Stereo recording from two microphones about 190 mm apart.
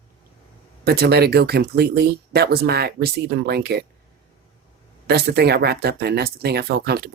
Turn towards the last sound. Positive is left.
turn(degrees=-60)  # may be behind; listen again after turning